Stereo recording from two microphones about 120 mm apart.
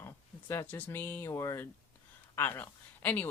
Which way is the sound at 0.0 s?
25° left (ahead or behind).